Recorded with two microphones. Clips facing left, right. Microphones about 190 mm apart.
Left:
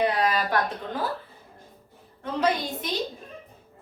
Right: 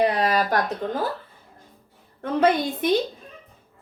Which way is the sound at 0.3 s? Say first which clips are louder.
Right 3 dB; 40° right (ahead or behind).